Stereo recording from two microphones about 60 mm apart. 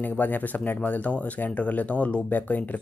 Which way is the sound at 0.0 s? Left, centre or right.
Left.